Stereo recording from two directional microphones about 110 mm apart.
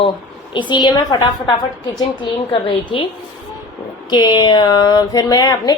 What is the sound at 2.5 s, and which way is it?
Speech, 55° left (ahead or behind).